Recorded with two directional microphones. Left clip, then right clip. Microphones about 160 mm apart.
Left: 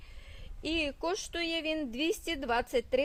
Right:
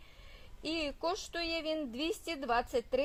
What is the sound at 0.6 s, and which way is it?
A woman's voice, 40° left (ahead or behind).